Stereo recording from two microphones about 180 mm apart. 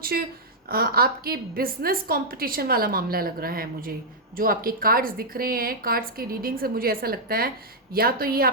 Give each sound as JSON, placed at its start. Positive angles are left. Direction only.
{"t": 0.1, "sound": "a woman's voice", "side_deg": -60}